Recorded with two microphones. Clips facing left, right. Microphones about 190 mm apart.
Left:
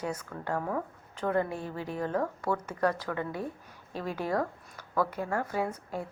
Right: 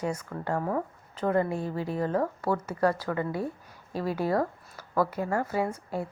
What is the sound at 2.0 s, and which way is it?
A woman's voice, 10° right (ahead or behind).